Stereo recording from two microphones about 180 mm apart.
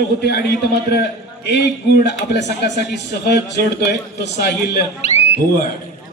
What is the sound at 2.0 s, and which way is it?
A man's voice, 70° left (ahead or behind).